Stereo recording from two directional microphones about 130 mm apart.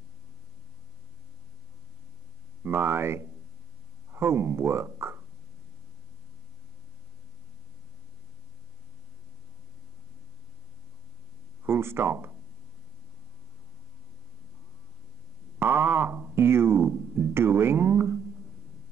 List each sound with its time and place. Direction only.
2.6 s speech: 15° right (ahead or behind)
11.6 s speech: 15° right (ahead or behind)
15.6 s speech: 15° right (ahead or behind)